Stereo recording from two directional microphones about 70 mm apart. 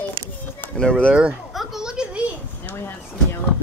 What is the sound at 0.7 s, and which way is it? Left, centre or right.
Speech, centre.